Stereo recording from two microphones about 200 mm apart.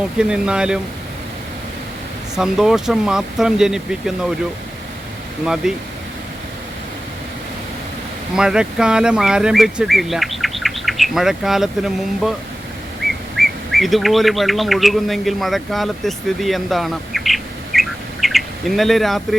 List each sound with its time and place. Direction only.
0.2 s speech: 5° right (ahead or behind)
2.3 s speech: centre (ahead or behind)
5.6 s speech: centre (ahead or behind)
8.4 s speech: 5° right (ahead or behind)
13.3 s speech: centre (ahead or behind)